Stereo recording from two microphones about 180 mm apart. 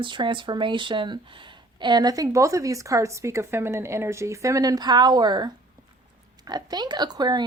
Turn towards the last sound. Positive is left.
turn(degrees=-25)  # may be behind; listen again after turning